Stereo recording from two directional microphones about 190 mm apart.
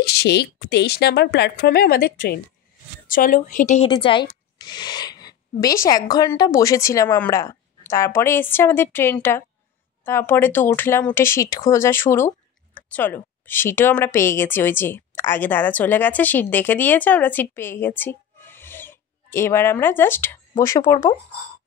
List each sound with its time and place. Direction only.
0.0 s a woman's voice: 60° left (ahead or behind); by 3.9 s 40° left (ahead or behind)
3.9 s speech: 25° left (ahead or behind)